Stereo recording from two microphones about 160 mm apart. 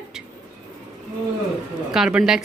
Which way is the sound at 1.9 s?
5° right (ahead or behind).